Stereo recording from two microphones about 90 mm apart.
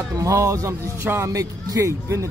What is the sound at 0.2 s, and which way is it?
Speech, 35° right (ahead or behind).